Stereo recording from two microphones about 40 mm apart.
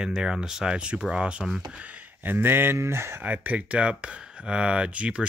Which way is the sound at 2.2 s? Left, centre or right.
Right.